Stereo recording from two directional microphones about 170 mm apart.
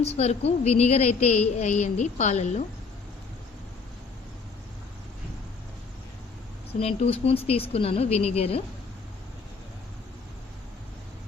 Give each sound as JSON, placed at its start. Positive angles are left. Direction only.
{"t": 0.0, "sound": "a woman's voice", "side_deg": 35}
{"t": 6.7, "sound": "a woman's voice", "side_deg": 35}